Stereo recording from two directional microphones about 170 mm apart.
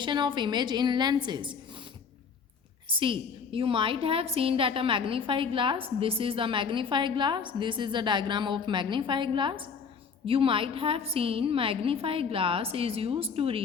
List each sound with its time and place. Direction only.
0.0 s a woman's voice: 25° right (ahead or behind)
2.9 s a woman's voice: 30° right (ahead or behind)